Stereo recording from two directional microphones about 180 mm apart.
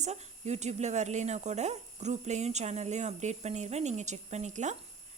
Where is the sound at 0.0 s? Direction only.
40° right (ahead or behind).